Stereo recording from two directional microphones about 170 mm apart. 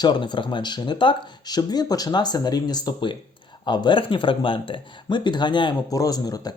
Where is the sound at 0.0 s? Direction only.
25° left (ahead or behind).